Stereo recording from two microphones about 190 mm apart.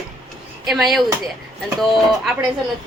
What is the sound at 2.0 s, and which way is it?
Speech, centre (ahead or behind).